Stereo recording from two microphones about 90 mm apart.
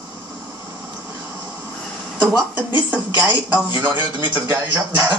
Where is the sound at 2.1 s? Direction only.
20° right (ahead or behind).